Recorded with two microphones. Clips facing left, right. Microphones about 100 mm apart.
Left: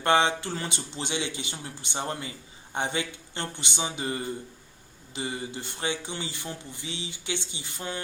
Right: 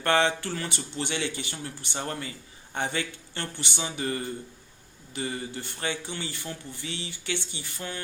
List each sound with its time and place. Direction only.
0.0 s speech: 15° left (ahead or behind)